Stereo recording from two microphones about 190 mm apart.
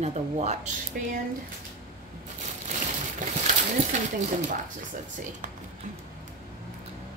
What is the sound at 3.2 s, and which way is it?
Speech, 45° right (ahead or behind).